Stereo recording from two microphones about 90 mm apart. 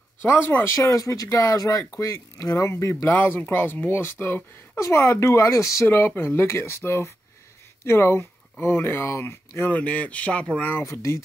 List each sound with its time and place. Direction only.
0.2 s speech: 25° left (ahead or behind)
0.7 s speech: 35° left (ahead or behind)
9.8 s speech: 15° left (ahead or behind)
10.8 s speech: 35° left (ahead or behind)